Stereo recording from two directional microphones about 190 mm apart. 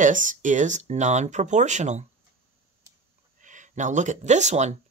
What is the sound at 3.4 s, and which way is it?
Speech, 40° right (ahead or behind).